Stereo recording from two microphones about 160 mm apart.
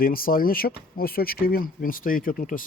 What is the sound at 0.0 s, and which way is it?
Speech, 65° left (ahead or behind).